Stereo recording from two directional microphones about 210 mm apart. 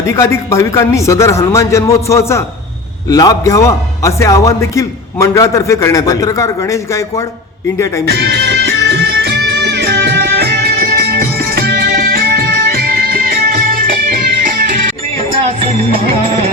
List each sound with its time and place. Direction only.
0.1 s a man's voice: 15° left (ahead or behind)
8.0 s music: 50° right (ahead or behind)